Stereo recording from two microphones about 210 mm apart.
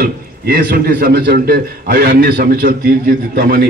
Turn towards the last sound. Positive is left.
turn(degrees=-45)  # may be behind; listen again after turning